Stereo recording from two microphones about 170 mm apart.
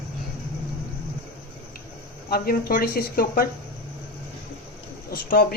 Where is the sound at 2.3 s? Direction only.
60° left (ahead or behind).